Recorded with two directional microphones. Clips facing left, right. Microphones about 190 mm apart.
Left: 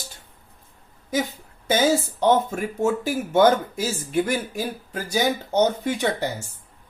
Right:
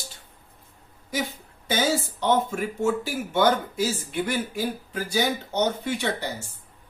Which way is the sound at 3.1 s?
45° left (ahead or behind).